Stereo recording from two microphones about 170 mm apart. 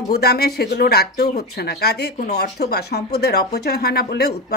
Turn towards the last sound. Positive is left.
turn(degrees=70)  # may be behind; listen again after turning